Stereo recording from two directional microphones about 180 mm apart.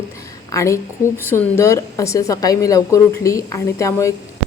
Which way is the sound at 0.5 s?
15° left (ahead or behind).